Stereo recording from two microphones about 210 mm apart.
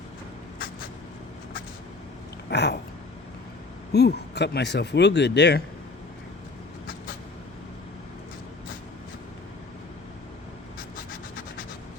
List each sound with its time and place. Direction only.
2.5 s speech: 55° left (ahead or behind)
3.9 s speech: 50° left (ahead or behind)